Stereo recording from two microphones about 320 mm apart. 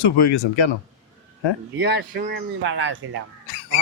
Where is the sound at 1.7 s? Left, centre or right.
Right.